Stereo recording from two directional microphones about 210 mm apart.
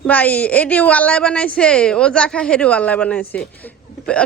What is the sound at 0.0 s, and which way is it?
A woman's voice, 5° left (ahead or behind).